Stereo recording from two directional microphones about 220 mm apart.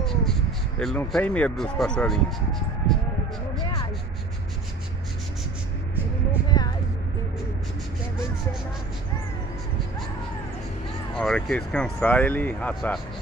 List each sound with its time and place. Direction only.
0.0 s speech: centre (ahead or behind)
6.5 s vehicle: 20° left (ahead or behind)
11.1 s speech: 5° left (ahead or behind)